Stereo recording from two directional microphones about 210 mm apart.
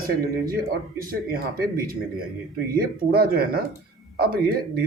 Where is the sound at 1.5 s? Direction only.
45° right (ahead or behind).